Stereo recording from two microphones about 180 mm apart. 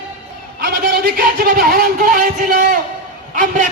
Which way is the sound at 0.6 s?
60° right (ahead or behind).